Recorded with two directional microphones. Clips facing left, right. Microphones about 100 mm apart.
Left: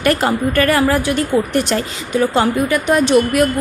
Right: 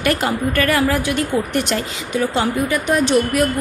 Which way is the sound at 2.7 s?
75° left (ahead or behind).